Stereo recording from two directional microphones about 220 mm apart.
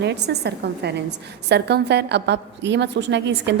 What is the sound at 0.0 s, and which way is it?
A woman's voice, 50° right (ahead or behind).